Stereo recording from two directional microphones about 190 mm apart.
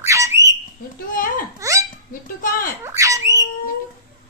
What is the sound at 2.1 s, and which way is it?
Dishes, 45° left (ahead or behind).